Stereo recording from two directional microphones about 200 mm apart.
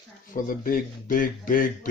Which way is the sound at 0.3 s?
45° left (ahead or behind).